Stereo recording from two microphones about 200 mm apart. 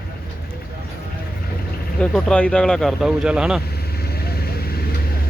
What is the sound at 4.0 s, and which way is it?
Vehicle, 50° left (ahead or behind).